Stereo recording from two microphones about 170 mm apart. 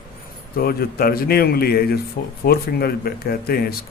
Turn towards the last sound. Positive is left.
turn(degrees=65)  # may be behind; listen again after turning